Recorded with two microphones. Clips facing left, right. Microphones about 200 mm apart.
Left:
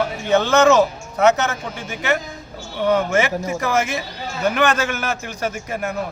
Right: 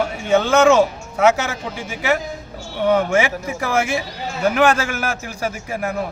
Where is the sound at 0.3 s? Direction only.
10° right (ahead or behind).